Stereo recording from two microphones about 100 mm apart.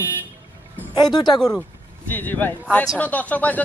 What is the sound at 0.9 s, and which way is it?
Speech, 45° left (ahead or behind).